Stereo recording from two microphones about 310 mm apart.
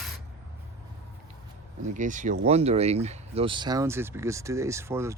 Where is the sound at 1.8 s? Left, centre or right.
Right.